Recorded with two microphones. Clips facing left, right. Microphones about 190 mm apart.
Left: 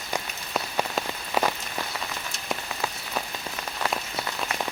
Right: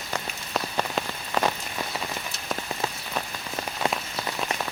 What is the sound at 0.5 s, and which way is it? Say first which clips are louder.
Rain on surface: even; 5° left (ahead or behind).